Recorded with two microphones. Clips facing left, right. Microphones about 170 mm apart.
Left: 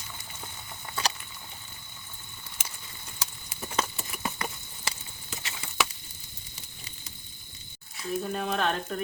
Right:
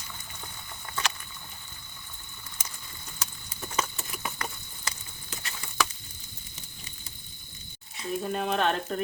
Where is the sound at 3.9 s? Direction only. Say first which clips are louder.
Left 2 dB; 25° left (ahead or behind).